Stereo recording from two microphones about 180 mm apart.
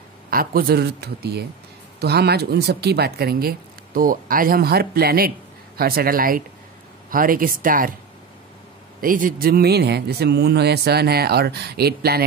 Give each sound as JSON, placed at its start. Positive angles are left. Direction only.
{"t": 0.3, "sound": "speech", "side_deg": -55}
{"t": 9.0, "sound": "speech", "side_deg": -50}